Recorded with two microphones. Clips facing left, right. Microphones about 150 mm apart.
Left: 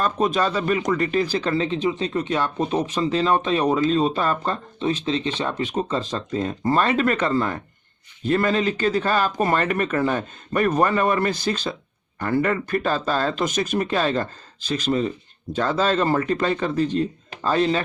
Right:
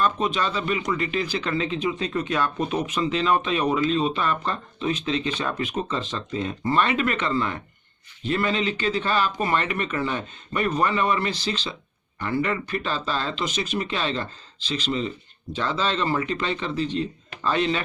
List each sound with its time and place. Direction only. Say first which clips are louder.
0.0 s speech: left 3 dB; 45° left (ahead or behind)